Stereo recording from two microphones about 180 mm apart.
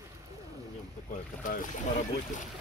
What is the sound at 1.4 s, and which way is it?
Speech, 50° left (ahead or behind).